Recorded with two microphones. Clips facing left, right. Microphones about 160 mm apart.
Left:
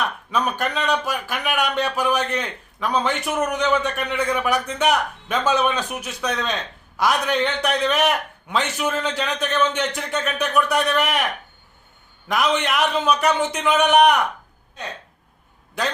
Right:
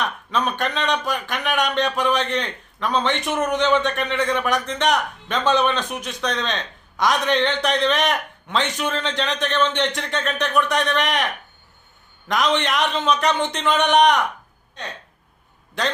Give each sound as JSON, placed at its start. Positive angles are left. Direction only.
{"t": 0.0, "sound": "speech", "side_deg": 10}
{"t": 12.3, "sound": "speech", "side_deg": 10}